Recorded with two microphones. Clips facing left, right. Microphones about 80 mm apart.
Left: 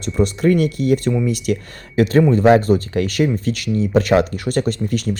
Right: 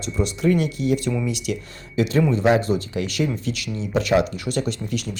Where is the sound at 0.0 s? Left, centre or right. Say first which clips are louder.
Left 5 dB; left.